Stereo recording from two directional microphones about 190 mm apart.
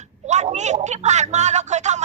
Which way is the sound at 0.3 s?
35° right (ahead or behind).